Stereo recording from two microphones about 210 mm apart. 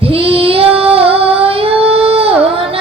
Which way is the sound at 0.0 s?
25° right (ahead or behind).